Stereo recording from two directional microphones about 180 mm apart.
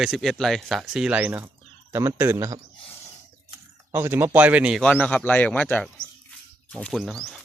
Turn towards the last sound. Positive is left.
turn(degrees=0)  # may be behind; listen again after turning